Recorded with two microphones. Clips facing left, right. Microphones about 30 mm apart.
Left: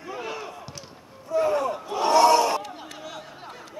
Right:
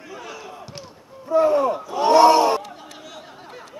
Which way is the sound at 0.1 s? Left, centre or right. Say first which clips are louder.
Left 3 dB; left.